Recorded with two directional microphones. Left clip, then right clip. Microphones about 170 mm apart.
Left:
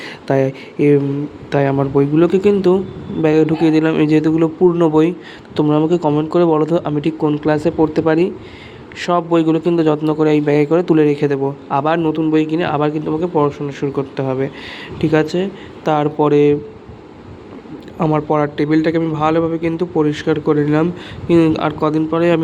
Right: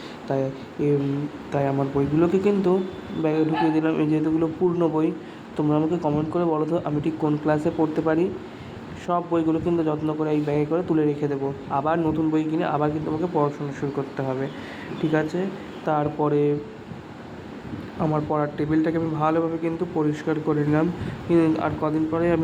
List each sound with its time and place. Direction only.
0.3 s a man's voice: 45° left (ahead or behind)
18.1 s a man's voice: 45° left (ahead or behind)